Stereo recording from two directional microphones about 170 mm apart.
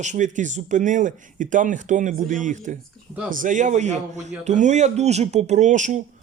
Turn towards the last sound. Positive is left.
turn(degrees=-45)  # may be behind; listen again after turning